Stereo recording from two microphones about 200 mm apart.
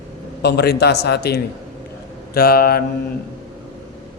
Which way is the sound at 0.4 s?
55° left (ahead or behind).